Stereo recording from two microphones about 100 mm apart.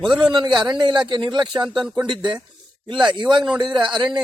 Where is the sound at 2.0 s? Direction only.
50° right (ahead or behind).